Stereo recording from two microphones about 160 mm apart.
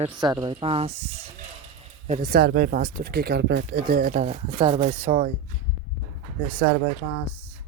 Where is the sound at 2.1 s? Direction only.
60° right (ahead or behind).